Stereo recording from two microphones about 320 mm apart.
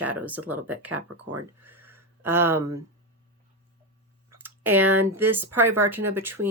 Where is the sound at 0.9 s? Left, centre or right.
Right.